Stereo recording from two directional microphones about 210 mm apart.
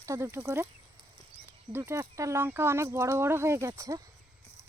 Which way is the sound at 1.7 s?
10° right (ahead or behind).